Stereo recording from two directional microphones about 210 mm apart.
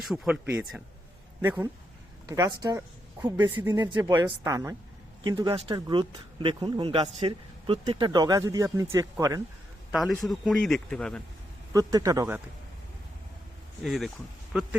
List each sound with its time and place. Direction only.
0.0 s a woman's voice: 5° right (ahead or behind)
9.9 s speech: centre (ahead or behind)
11.7 s a woman's voice: 15° right (ahead or behind)
13.8 s speech: centre (ahead or behind)